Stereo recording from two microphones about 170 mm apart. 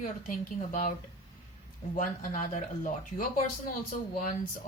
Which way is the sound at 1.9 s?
50° left (ahead or behind).